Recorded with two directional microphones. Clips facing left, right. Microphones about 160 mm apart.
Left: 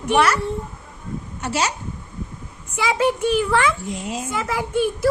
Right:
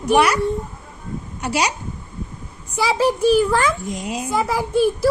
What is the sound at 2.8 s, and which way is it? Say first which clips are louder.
Speech: right 2 dB; 35° right (ahead or behind).